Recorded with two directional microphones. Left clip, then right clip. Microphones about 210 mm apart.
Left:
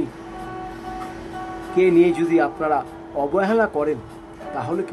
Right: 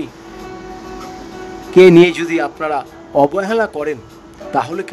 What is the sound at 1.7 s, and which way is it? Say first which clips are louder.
A man's voice: right 9 dB; 55° right (ahead or behind).